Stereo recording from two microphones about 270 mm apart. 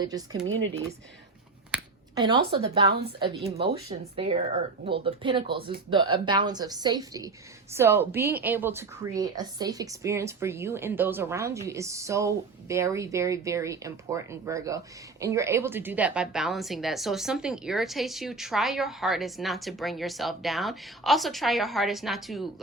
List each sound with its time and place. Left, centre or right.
0.0 s a woman's voice: centre
1.7 s a sound: centre
2.6 s a woman's voice: centre